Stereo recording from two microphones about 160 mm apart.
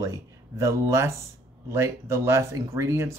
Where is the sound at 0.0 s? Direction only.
20° right (ahead or behind).